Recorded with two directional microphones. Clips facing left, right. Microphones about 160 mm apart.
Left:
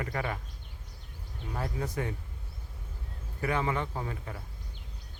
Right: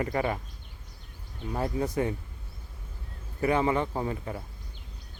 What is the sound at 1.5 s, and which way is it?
Speech, 25° right (ahead or behind).